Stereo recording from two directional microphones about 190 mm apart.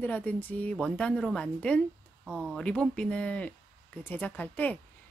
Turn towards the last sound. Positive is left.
turn(degrees=10)  # may be behind; listen again after turning